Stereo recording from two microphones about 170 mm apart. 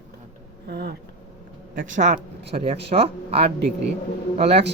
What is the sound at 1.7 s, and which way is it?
Speech, 50° right (ahead or behind).